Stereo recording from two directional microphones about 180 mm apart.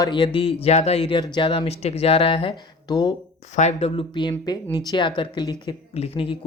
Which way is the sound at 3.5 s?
40° left (ahead or behind).